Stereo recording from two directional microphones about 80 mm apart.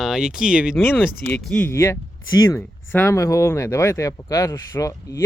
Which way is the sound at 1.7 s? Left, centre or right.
Left.